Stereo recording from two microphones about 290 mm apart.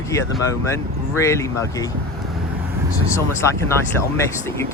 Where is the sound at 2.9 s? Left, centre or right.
Centre.